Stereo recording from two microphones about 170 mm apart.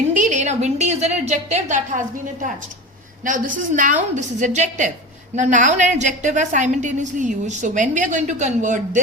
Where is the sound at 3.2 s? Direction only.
50° right (ahead or behind).